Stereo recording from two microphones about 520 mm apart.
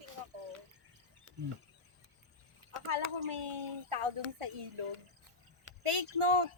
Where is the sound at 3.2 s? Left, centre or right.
Right.